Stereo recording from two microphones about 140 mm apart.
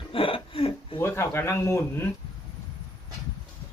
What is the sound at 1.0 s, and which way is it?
Speech, 20° left (ahead or behind).